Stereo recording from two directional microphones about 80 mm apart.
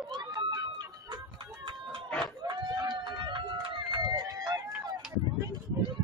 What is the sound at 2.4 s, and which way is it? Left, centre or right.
Run, right.